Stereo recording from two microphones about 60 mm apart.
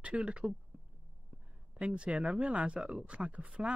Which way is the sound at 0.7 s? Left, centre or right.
Right.